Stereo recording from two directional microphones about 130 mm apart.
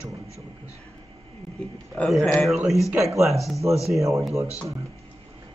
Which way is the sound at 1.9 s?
5° left (ahead or behind).